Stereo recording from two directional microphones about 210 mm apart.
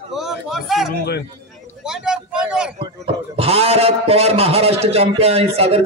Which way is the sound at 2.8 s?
25° right (ahead or behind).